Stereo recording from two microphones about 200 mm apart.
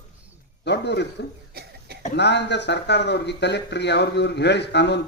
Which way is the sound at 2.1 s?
60° left (ahead or behind).